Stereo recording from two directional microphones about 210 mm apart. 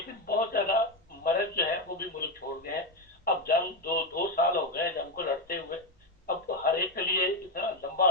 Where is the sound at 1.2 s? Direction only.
45° left (ahead or behind).